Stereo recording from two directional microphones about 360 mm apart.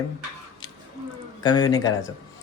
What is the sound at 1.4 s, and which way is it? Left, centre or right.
Speech, centre.